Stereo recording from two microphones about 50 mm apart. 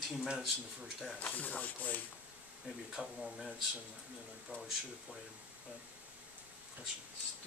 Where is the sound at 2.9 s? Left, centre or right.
Centre.